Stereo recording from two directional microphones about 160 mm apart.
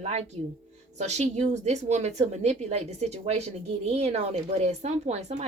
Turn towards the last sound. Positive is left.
turn(degrees=-45)  # may be behind; listen again after turning